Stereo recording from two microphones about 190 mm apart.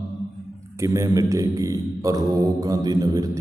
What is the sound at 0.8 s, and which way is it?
Speech, 15° right (ahead or behind).